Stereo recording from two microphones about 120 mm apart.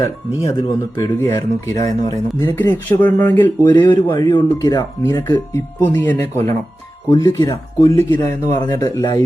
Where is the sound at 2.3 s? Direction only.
20° left (ahead or behind).